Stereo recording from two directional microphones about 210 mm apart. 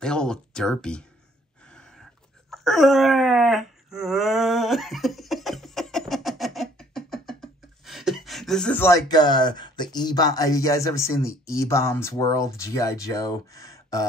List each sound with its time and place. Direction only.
0.0 s speech: 5° left (ahead or behind)
2.5 s wail: centre (ahead or behind)
7.8 s a sound: centre (ahead or behind); by 9.8 s 20° left (ahead or behind)
9.9 s speech: 20° left (ahead or behind)